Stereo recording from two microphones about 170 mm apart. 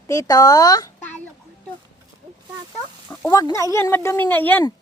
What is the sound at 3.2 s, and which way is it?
Speech, 20° left (ahead or behind).